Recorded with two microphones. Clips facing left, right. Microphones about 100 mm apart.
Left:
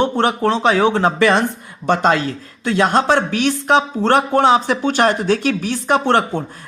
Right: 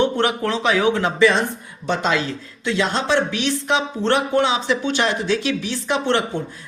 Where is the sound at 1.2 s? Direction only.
60° left (ahead or behind).